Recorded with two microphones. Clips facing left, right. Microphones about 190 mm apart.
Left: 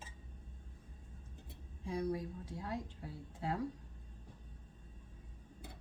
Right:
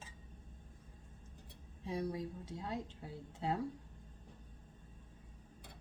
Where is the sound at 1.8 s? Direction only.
25° right (ahead or behind).